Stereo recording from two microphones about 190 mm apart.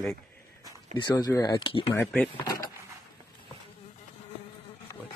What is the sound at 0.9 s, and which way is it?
Speech, 20° left (ahead or behind).